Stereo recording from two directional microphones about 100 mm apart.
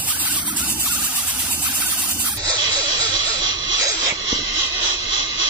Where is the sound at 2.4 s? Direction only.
40° right (ahead or behind).